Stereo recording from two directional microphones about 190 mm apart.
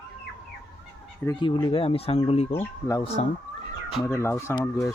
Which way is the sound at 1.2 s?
25° left (ahead or behind).